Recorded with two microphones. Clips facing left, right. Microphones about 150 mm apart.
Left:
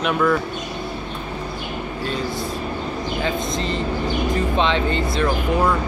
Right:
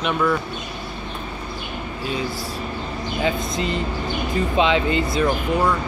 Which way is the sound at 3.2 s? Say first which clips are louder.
Right 2 dB; 5° right (ahead or behind).